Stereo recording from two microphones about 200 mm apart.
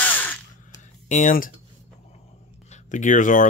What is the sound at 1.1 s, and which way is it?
Speech, 40° left (ahead or behind).